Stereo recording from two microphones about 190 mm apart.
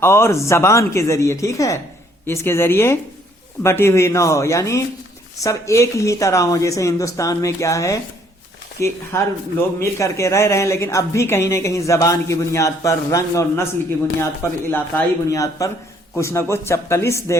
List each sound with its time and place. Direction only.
0.0 s speech: 15° left (ahead or behind)